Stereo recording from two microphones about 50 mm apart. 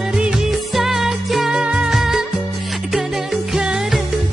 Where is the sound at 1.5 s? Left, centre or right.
Centre.